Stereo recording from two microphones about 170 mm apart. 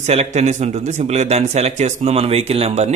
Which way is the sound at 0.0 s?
40° right (ahead or behind).